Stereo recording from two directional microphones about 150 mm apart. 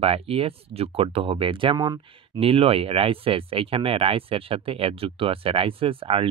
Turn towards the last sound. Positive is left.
turn(degrees=-40)  # may be behind; listen again after turning